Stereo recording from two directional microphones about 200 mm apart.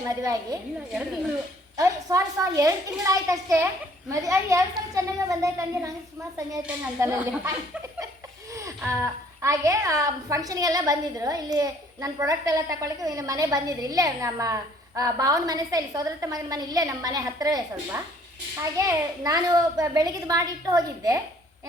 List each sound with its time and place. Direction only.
0.0 s a woman's voice: 15° right (ahead or behind)
1.7 s a woman's voice: 15° right (ahead or behind)
9.4 s a woman's voice: 15° right (ahead or behind)